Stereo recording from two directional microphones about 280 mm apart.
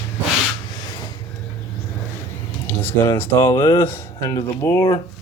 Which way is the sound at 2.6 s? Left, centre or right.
Centre.